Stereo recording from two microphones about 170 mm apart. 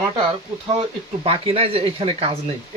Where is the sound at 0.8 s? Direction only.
35° right (ahead or behind).